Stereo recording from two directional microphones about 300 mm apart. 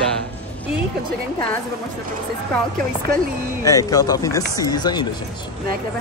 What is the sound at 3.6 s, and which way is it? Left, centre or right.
Speech, centre.